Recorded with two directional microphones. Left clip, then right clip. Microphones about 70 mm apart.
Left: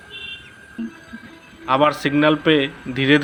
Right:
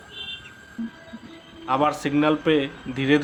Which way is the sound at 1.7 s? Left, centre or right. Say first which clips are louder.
Left 5 dB; left.